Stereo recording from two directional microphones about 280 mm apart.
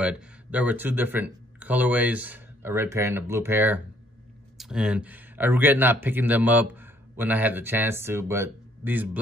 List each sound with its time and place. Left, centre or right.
0.0 s speech: centre